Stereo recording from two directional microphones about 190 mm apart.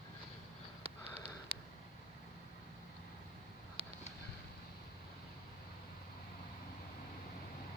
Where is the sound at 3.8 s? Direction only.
30° right (ahead or behind).